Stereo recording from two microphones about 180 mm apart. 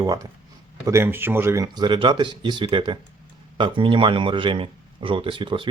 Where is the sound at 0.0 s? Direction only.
20° right (ahead or behind).